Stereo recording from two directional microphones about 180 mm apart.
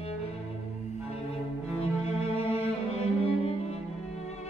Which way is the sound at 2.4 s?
35° left (ahead or behind).